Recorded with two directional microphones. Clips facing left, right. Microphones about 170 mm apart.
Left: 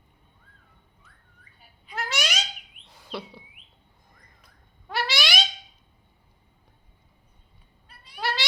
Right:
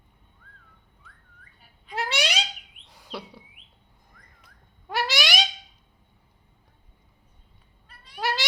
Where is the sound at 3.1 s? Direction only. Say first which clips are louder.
Left 2 dB; 10° right (ahead or behind).